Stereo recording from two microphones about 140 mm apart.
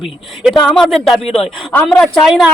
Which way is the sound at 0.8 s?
Centre (ahead or behind).